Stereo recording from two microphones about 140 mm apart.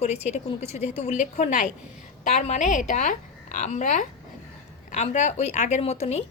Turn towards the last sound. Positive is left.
turn(degrees=50)  # may be behind; listen again after turning